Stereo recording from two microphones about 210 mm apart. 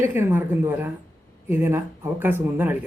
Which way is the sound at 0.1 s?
10° right (ahead or behind).